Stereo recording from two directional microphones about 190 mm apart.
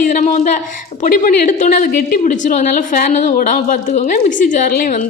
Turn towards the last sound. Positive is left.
turn(degrees=45)  # may be behind; listen again after turning